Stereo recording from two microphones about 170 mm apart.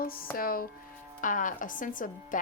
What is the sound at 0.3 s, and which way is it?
Speech, 55° left (ahead or behind).